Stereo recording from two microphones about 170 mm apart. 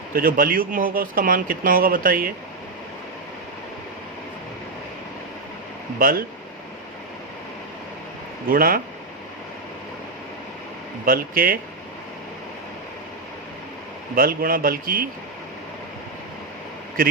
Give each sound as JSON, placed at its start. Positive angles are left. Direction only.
{"t": 0.1, "sound": "speech", "side_deg": -60}
{"t": 6.0, "sound": "speech", "side_deg": -60}
{"t": 8.4, "sound": "speech", "side_deg": -60}
{"t": 11.0, "sound": "speech", "side_deg": -60}
{"t": 14.2, "sound": "speech", "side_deg": -60}